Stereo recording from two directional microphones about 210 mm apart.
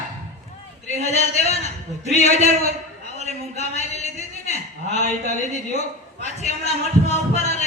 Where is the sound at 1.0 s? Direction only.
30° left (ahead or behind).